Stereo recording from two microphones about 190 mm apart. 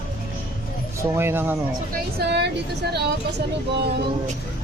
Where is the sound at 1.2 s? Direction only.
10° right (ahead or behind).